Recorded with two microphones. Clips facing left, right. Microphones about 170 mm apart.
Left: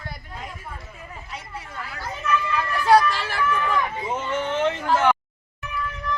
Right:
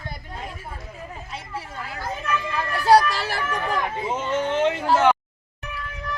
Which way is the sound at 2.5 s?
35° right (ahead or behind).